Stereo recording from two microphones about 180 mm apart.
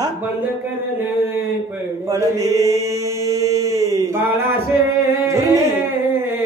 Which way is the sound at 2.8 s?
15° right (ahead or behind).